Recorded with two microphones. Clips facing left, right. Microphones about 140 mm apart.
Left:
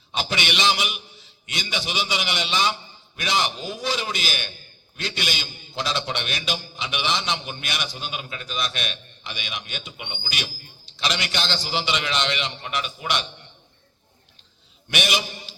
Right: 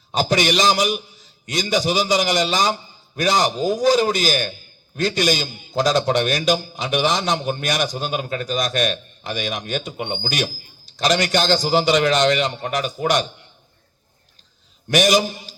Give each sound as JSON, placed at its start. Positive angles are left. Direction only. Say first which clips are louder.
{"t": 0.1, "sound": "a man's voice", "louder": "right 9 dB", "side_deg": -40}
{"t": 14.8, "sound": "a man's voice", "louder": "right 10 dB", "side_deg": -40}